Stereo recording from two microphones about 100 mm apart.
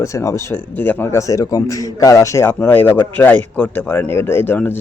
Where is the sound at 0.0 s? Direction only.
30° left (ahead or behind).